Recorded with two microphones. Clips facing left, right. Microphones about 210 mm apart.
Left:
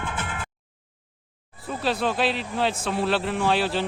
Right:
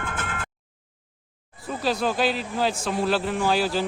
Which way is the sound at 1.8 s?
Centre (ahead or behind).